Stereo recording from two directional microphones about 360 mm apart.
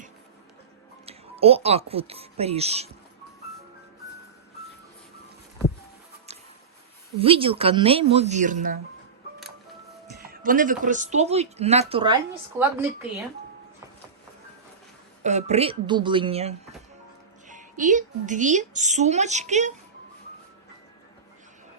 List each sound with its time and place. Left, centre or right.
1.0 s speech: centre
7.2 s speech: centre
10.2 s speech: right; by 13.1 s centre
15.2 s a woman's voice: centre